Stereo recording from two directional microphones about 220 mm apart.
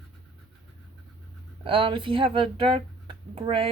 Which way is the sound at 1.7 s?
25° right (ahead or behind).